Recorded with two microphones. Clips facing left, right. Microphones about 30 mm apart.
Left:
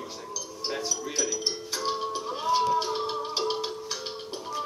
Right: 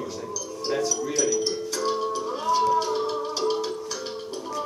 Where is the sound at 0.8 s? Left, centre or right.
Centre.